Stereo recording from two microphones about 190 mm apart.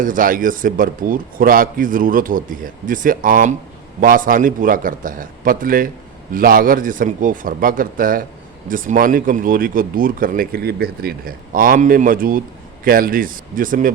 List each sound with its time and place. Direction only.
0.0 s speech: 45° right (ahead or behind)